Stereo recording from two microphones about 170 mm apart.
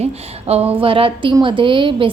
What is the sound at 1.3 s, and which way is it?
Speech, 30° right (ahead or behind).